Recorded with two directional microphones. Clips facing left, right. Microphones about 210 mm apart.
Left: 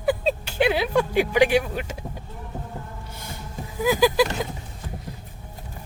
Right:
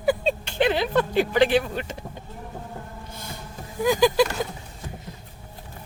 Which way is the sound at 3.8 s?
5° left (ahead or behind).